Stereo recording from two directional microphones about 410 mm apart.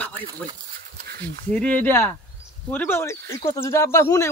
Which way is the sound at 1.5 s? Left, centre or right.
Centre.